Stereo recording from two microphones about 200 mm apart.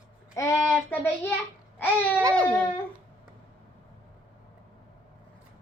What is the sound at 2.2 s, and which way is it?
Baby cry, 20° right (ahead or behind).